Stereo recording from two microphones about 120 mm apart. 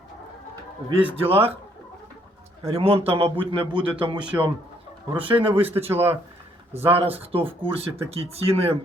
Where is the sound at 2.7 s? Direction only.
55° right (ahead or behind).